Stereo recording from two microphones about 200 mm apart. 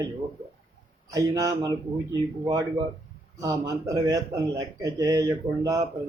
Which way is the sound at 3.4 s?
15° right (ahead or behind).